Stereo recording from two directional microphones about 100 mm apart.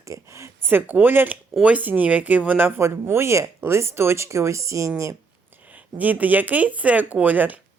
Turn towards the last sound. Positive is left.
turn(degrees=-15)  # may be behind; listen again after turning